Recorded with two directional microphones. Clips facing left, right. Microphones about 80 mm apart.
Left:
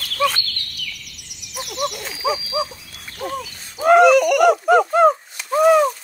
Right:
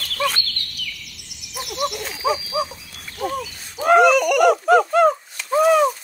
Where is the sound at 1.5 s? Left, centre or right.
Centre.